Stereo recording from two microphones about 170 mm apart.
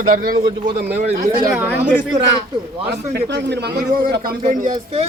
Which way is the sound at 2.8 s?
75° right (ahead or behind).